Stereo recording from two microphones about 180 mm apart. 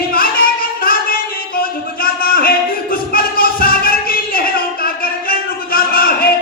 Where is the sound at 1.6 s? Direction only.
55° left (ahead or behind).